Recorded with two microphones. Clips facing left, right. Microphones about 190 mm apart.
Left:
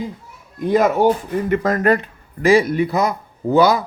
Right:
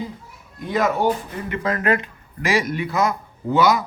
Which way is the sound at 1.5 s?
45° left (ahead or behind).